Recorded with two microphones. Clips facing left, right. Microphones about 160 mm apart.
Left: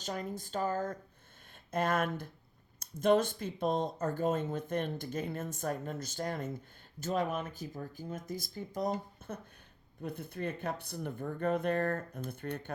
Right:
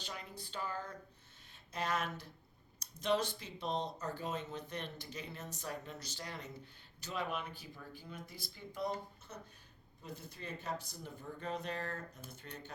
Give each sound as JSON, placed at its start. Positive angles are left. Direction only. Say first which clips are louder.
{"t": 0.0, "sound": "speech", "louder": "left 10 dB", "side_deg": 45}
{"t": 9.2, "sound": "a sound", "louder": "left 10 dB", "side_deg": 55}
{"t": 10.0, "sound": "speech", "louder": "left 10 dB", "side_deg": 55}